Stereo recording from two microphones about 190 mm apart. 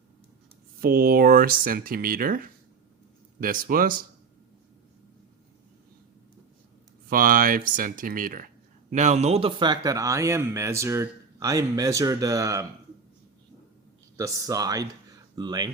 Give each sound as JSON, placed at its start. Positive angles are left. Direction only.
{"t": 0.8, "sound": "speech", "side_deg": -50}
{"t": 7.1, "sound": "a man's voice", "side_deg": -45}
{"t": 14.2, "sound": "speech", "side_deg": -20}